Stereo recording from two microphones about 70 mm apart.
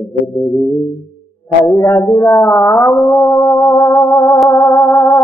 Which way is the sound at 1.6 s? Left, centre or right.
Left.